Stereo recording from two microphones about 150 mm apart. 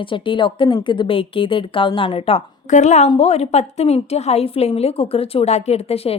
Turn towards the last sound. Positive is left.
turn(degrees=45)  # may be behind; listen again after turning